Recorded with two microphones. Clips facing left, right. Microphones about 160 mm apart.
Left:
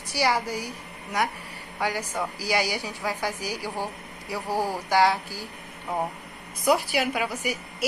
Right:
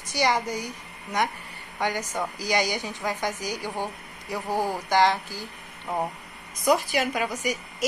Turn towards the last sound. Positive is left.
turn(degrees=10)  # may be behind; listen again after turning